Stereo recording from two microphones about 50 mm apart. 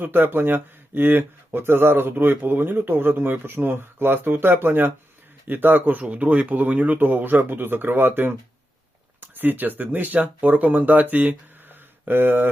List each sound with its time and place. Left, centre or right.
0.0 s speech: right